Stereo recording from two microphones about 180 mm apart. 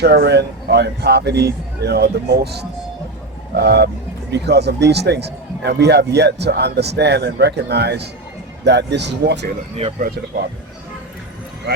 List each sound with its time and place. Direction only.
0.0 s a man's voice: 65° right (ahead or behind)
10.0 s speech: 55° right (ahead or behind)